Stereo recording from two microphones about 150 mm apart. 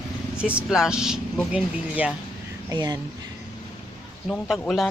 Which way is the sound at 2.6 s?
25° right (ahead or behind).